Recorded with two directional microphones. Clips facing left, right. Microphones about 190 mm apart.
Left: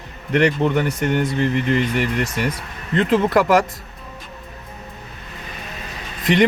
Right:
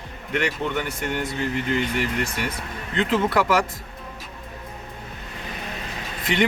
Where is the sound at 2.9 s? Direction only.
45° left (ahead or behind).